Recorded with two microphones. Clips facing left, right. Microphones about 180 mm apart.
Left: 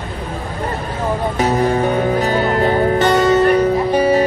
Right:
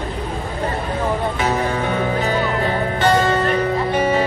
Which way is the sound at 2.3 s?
45° left (ahead or behind).